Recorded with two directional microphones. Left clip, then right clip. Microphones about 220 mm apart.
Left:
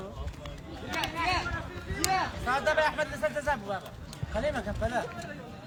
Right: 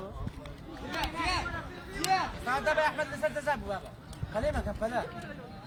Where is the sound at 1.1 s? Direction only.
45° right (ahead or behind).